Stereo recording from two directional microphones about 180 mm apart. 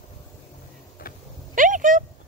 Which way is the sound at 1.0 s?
55° left (ahead or behind).